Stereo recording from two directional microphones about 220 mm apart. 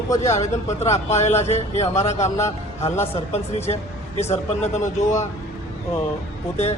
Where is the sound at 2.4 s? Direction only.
10° left (ahead or behind).